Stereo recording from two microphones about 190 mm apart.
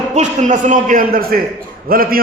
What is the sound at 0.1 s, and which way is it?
A man's voice, 40° right (ahead or behind).